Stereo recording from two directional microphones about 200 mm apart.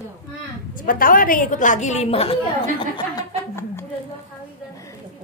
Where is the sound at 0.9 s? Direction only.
45° left (ahead or behind).